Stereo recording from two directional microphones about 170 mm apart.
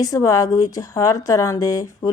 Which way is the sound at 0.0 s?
20° left (ahead or behind).